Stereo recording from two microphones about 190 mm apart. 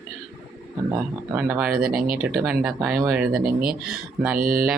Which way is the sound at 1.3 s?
10° right (ahead or behind).